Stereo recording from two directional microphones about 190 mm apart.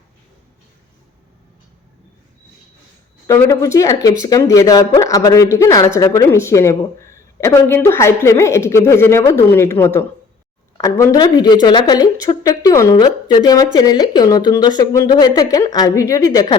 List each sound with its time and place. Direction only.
3.2 s a man's voice: 15° left (ahead or behind)